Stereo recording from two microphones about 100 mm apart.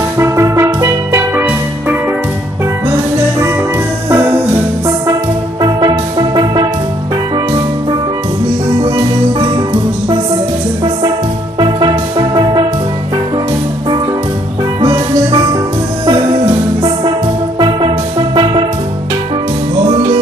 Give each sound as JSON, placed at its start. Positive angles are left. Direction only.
{"t": 0.2, "sound": "music", "side_deg": -30}
{"t": 4.1, "sound": "music", "side_deg": -25}
{"t": 5.6, "sound": "music", "side_deg": -40}
{"t": 11.6, "sound": "music", "side_deg": -50}
{"t": 17.6, "sound": "music", "side_deg": -50}